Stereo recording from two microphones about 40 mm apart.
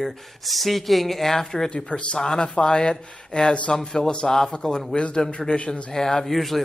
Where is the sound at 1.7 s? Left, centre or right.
Left.